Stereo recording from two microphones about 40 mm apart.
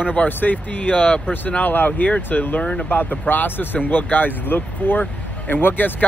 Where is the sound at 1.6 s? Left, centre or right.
Left.